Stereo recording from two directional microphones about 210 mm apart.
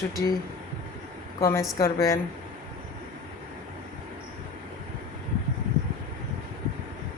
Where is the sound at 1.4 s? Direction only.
15° left (ahead or behind).